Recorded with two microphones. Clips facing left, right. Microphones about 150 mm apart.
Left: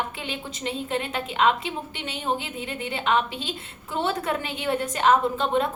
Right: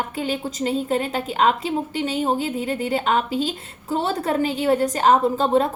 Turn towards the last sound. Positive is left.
turn(degrees=-35)  # may be behind; listen again after turning